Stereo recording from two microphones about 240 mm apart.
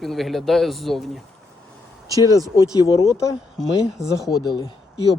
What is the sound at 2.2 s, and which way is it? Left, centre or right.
Speech, centre.